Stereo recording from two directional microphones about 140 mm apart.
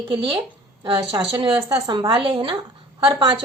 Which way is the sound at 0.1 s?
40° right (ahead or behind).